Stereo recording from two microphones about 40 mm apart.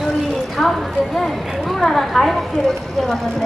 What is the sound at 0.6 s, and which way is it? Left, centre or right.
Clip-clop, centre.